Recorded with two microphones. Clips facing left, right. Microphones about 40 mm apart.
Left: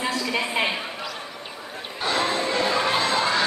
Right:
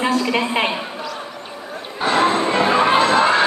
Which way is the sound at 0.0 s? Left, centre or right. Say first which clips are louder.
Right 7 dB; right.